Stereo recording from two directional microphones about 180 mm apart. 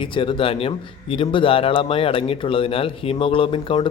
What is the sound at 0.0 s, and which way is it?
Speech, 30° left (ahead or behind).